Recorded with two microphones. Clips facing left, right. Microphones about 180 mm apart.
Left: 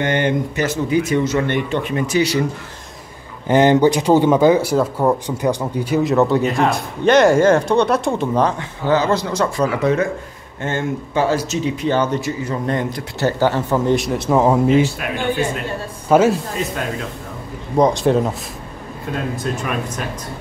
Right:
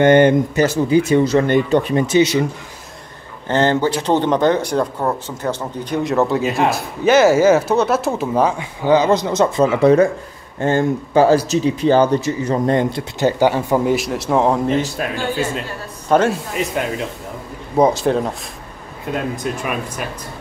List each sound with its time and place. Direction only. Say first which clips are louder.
0.0 s a man's voice: right 8 dB; 50° right (ahead or behind)
0.6 s speech: right 4 dB; 35° right (ahead or behind)
3.4 s speech: left 4 dB; 15° left (ahead or behind); by 13.0 s 30° right (ahead or behind)
13.2 s speech: right 2 dB; 15° right (ahead or behind)
13.9 s speech: left 1 dB; centre (ahead or behind)
15.0 s speech: right 2 dB; 35° right (ahead or behind)
16.1 s speech: left 2 dB; 5° left (ahead or behind)
17.7 s speech: even; 5° right (ahead or behind)
19.3 s speech: even; 15° right (ahead or behind)